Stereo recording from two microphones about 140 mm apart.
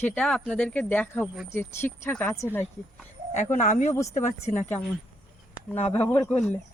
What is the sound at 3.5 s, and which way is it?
Speech, 60° left (ahead or behind).